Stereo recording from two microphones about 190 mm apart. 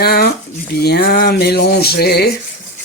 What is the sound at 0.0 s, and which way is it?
Speech, 55° left (ahead or behind).